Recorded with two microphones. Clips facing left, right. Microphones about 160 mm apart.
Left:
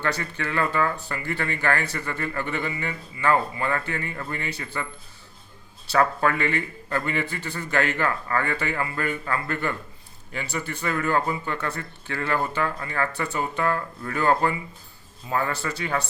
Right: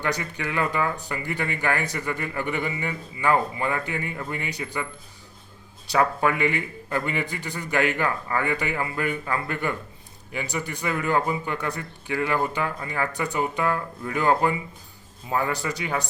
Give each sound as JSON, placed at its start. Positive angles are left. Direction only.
{"t": 0.0, "sound": "speech", "side_deg": -15}
{"t": 5.9, "sound": "speech", "side_deg": -15}